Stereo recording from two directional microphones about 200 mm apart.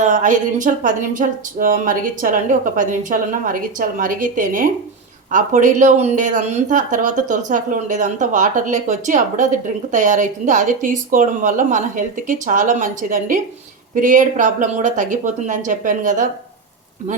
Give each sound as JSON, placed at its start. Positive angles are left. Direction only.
{"t": 0.0, "sound": "speech", "side_deg": -40}